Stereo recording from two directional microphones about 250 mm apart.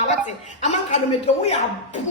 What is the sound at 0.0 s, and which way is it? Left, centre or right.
A woman's voice, left.